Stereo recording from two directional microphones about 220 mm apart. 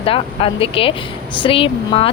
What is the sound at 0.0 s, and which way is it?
A woman's voice, 25° left (ahead or behind).